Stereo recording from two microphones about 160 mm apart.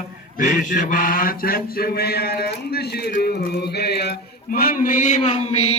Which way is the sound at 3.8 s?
90° left.